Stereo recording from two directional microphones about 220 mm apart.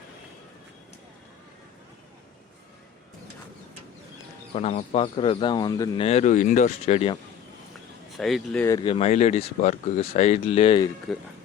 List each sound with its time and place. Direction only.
4.5 s speech: 30° left (ahead or behind)
6.1 s speech: 30° left (ahead or behind)
8.1 s speech: centre (ahead or behind)
8.6 s speech: 20° left (ahead or behind)
11.1 s speech: centre (ahead or behind)